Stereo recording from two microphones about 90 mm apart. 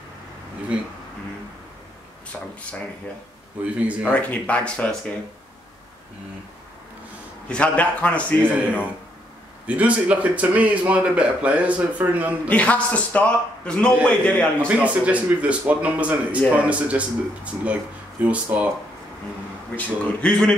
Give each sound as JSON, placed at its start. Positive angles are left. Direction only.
{"t": 4.0, "sound": "a man's voice", "side_deg": 15}
{"t": 7.4, "sound": "a man's voice", "side_deg": 15}
{"t": 9.7, "sound": "speech", "side_deg": -15}
{"t": 12.4, "sound": "a man's voice", "side_deg": 15}
{"t": 14.8, "sound": "speech", "side_deg": -15}
{"t": 19.7, "sound": "a man's voice", "side_deg": 15}